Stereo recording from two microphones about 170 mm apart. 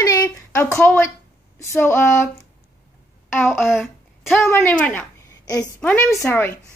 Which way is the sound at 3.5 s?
5° right (ahead or behind).